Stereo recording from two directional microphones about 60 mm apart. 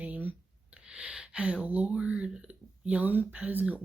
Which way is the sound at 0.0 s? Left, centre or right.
Right.